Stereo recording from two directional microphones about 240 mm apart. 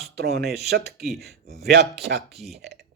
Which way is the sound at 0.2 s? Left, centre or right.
Right.